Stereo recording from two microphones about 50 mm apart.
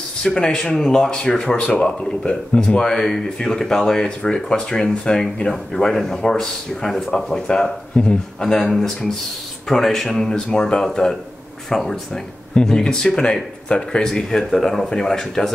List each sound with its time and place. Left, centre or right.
0.2 s speech: centre
7.9 s a man's voice: left
8.4 s speech: centre